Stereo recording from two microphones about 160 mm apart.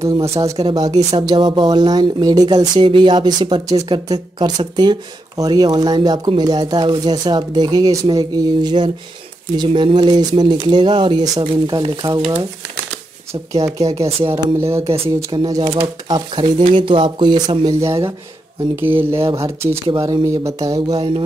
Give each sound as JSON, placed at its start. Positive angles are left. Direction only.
{"t": 0.7, "sound": "speech", "side_deg": -25}
{"t": 13.7, "sound": "speech", "side_deg": -20}
{"t": 13.9, "sound": "speech", "side_deg": -40}
{"t": 14.3, "sound": "speech", "side_deg": -15}
{"t": 17.7, "sound": "speech", "side_deg": -20}